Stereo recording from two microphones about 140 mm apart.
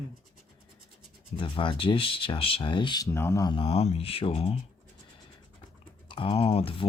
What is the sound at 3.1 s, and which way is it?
Speech, 20° left (ahead or behind).